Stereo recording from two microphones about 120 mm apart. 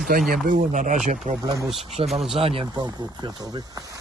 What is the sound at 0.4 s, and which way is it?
Speech, 90° right.